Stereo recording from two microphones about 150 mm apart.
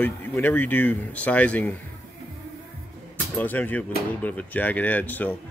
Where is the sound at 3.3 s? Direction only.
10° left (ahead or behind).